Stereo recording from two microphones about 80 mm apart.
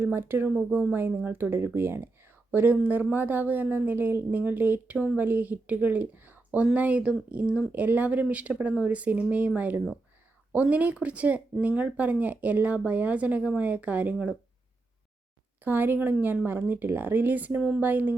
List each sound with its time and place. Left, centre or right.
0.0 s speech: right
0.5 s speech: centre
0.9 s speech: right
15.6 s speech: right